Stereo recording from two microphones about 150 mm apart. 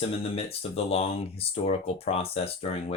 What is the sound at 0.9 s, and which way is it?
Speech, 40° left (ahead or behind).